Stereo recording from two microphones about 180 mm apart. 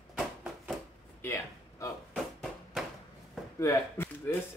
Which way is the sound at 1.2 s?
15° left (ahead or behind).